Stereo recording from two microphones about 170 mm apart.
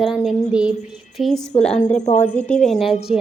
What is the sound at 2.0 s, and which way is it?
Speech, 45° left (ahead or behind).